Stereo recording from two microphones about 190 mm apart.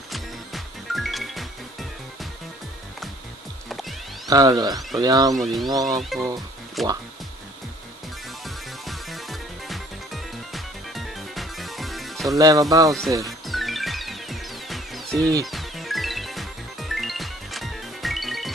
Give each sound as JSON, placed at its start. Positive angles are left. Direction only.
{"t": 0.1, "sound": "music", "side_deg": 0}
{"t": 4.3, "sound": "speech", "side_deg": -20}
{"t": 5.3, "sound": "speech", "side_deg": 0}
{"t": 5.7, "sound": "speech", "side_deg": -20}
{"t": 5.9, "sound": "speech", "side_deg": 0}
{"t": 8.5, "sound": "music", "side_deg": 0}
{"t": 12.4, "sound": "speech", "side_deg": -20}
{"t": 13.5, "sound": "music", "side_deg": 0}